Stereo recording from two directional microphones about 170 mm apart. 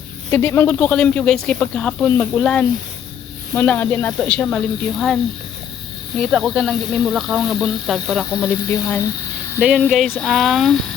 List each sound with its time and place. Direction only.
0.3 s speech: 10° left (ahead or behind)
6.3 s speech: centre (ahead or behind)
8.3 s speech: 20° left (ahead or behind)
9.7 s speech: 5° left (ahead or behind)